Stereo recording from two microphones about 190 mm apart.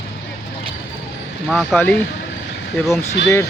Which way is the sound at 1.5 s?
Centre (ahead or behind).